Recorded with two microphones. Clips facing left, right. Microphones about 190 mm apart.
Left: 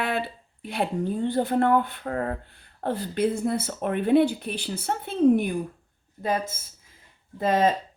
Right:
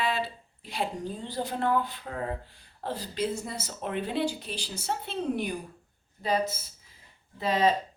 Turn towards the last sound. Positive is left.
turn(degrees=50)  # may be behind; listen again after turning